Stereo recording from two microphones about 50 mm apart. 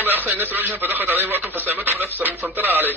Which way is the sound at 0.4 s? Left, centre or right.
Right.